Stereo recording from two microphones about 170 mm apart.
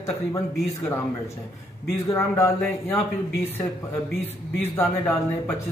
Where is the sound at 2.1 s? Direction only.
15° left (ahead or behind).